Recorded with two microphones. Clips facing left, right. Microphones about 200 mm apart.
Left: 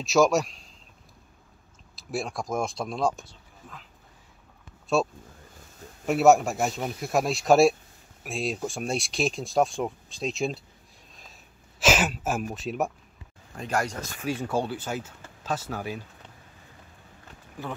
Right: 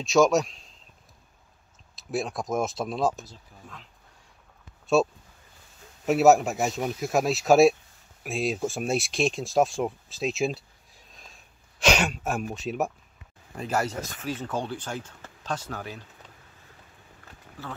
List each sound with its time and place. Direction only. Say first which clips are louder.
0.0 s speech: right 1 dB; centre (ahead or behind)
2.0 s speech: right 2 dB; centre (ahead or behind)
5.0 s speech: right 3 dB; centre (ahead or behind)
11.8 s speech: even; 5° left (ahead or behind)
14.2 s speech: left 4 dB; 10° left (ahead or behind)
17.6 s speech: left 4 dB; 15° left (ahead or behind)